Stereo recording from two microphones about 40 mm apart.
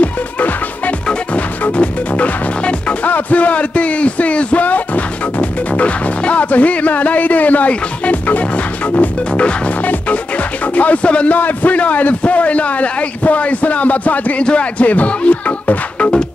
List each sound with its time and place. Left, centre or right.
0.0 s music: left
3.1 s a sound: left
4.6 s speech: left
10.7 s a man's voice: left
11.3 s a man's voice: left
16.0 s music: left